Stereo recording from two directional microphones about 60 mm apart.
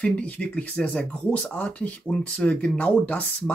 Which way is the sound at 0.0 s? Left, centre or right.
Centre.